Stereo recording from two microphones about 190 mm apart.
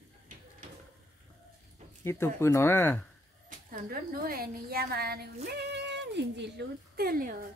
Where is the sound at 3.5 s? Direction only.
45° right (ahead or behind).